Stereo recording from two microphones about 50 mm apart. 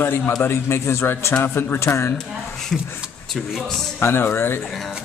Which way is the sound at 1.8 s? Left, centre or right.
Left.